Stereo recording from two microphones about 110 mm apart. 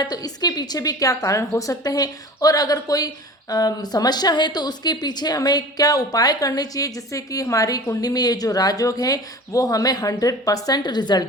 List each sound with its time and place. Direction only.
0.0 s a woman's voice: 40° left (ahead or behind)